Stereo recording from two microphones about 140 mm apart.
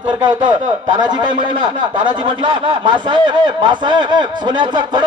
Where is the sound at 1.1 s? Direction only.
35° right (ahead or behind).